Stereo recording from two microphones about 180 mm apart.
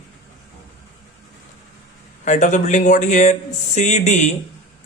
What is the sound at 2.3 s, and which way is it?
Speech, 40° left (ahead or behind).